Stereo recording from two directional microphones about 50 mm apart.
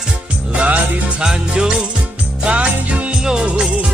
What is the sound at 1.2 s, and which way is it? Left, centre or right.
Music, centre.